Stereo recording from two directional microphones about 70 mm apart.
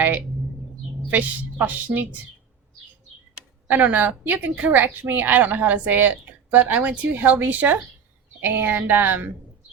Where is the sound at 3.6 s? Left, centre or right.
Right.